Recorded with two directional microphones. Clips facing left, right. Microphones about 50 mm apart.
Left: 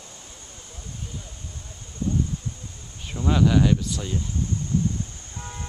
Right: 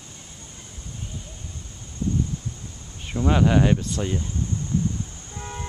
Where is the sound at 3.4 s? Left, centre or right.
Right.